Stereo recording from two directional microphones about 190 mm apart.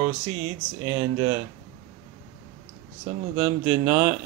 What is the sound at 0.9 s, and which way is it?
Speech, 20° right (ahead or behind).